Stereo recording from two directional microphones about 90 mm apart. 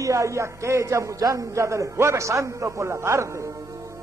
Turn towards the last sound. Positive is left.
turn(degrees=-30)  # may be behind; listen again after turning